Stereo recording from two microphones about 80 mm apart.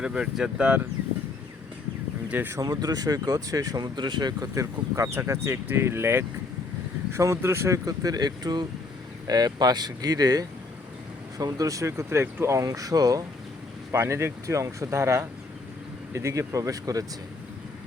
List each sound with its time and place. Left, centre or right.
0.0 s speech: centre
2.3 s speech: right
2.6 s speech: right
4.5 s speech: right
7.9 s speech: right
13.9 s speech: right